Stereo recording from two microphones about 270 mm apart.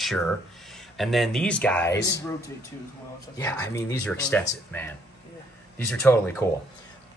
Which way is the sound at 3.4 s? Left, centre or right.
Centre.